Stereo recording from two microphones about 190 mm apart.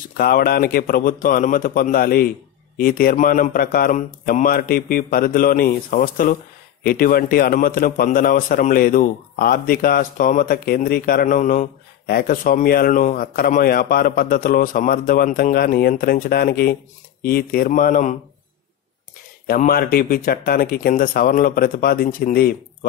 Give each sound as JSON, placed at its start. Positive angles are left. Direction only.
{"t": 0.2, "sound": "a man's voice", "side_deg": 50}
{"t": 19.4, "sound": "a man's voice", "side_deg": 50}